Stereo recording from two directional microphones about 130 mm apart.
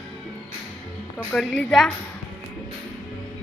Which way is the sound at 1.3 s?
5° left (ahead or behind).